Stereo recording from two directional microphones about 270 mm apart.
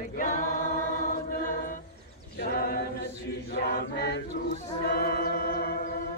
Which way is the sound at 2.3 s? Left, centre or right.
Left.